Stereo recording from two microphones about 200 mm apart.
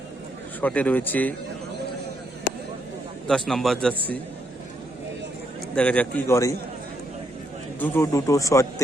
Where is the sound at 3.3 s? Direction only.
Centre (ahead or behind).